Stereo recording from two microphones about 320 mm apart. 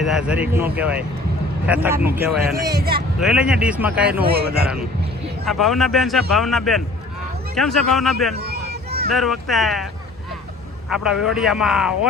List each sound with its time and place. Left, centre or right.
0.3 s a man's voice: centre
2.4 s speech: right
3.2 s a man's voice: centre
4.2 s speech: right
5.5 s a man's voice: centre